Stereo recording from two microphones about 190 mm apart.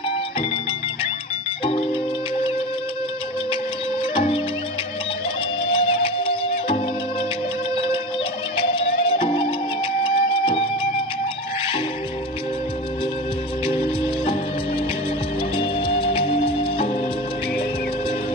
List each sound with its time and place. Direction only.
1.6 s music: 30° left (ahead or behind)
4.1 s music: 30° left (ahead or behind)
5.7 s music: 30° left (ahead or behind)
8.5 s music: 25° left (ahead or behind)
15.5 s music: 25° left (ahead or behind)